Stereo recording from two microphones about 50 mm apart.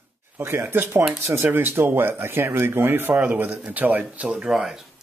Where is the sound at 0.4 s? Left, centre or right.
Right.